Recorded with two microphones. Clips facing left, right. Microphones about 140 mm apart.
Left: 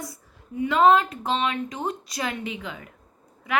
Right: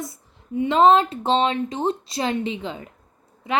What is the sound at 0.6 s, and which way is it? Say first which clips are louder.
Speech: right 3 dB; 25° right (ahead or behind).